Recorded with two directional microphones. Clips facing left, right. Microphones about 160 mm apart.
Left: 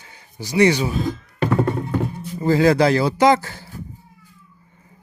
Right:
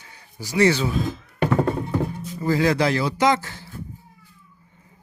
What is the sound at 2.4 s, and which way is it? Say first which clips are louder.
Speech: left 5 dB; 35° left (ahead or behind).